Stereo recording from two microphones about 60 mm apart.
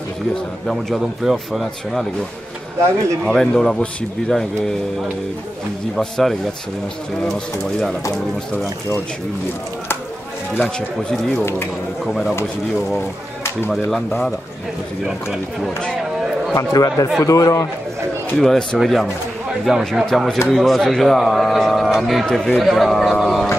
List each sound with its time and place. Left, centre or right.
0.9 s a man's voice: centre
3.3 s speech: centre
5.9 s a man's voice: centre
11.1 s a man's voice: centre
13.7 s a man's voice: centre
15.0 s speech: centre
16.5 s speech: left
17.2 s speech: left
18.4 s a man's voice: centre